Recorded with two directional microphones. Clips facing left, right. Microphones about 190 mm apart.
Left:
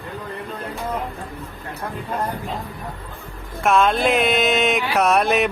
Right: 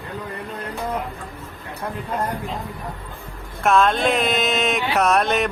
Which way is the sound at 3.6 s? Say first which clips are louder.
Even; centre (ahead or behind).